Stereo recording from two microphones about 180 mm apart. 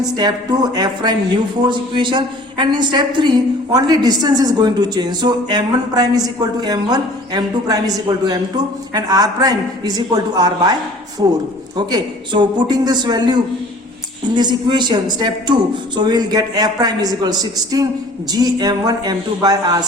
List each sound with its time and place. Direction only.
0.0 s a woman's voice: 20° right (ahead or behind)